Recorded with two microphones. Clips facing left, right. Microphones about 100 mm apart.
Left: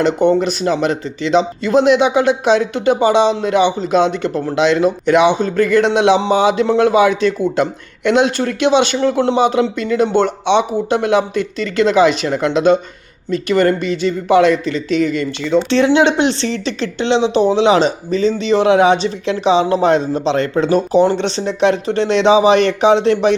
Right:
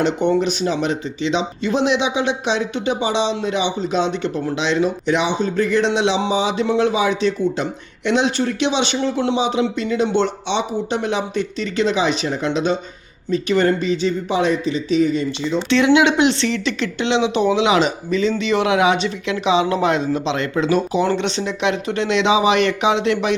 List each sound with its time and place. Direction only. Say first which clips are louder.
0.0 s speech: left 4 dB; 45° left (ahead or behind); by 15.5 s 65° left (ahead or behind)
16.0 s speech: left 2 dB; 35° left (ahead or behind)